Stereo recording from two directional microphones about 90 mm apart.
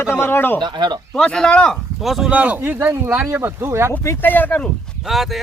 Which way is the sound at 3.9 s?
25° left (ahead or behind).